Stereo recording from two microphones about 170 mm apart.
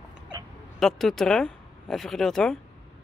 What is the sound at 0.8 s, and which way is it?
Speech, centre (ahead or behind).